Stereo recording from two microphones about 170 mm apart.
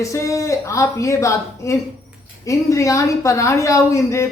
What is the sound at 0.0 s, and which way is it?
A woman's voice, 15° left (ahead or behind).